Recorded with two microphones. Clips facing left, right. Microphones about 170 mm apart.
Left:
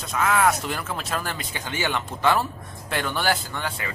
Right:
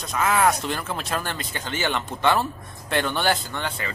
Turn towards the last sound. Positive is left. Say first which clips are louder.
# right 1 dB
turn(degrees=5)  # may be behind; listen again after turning